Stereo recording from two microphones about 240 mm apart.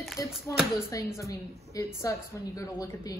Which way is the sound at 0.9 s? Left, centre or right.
Centre.